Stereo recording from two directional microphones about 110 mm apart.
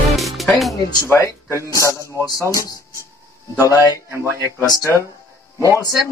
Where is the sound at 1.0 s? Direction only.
25° left (ahead or behind).